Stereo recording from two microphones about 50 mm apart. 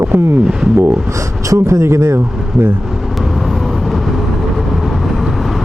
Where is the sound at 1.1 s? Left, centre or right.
Right.